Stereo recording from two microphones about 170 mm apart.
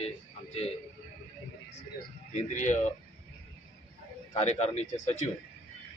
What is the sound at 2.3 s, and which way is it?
Speech, 45° left (ahead or behind).